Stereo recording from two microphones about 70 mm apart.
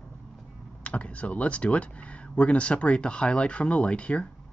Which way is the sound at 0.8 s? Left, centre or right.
Centre.